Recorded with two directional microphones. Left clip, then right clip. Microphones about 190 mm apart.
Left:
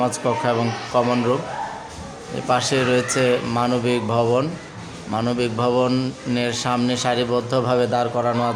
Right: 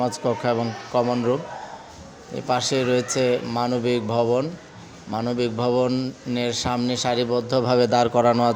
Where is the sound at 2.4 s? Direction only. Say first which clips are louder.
Left 3 dB; 20° right (ahead or behind).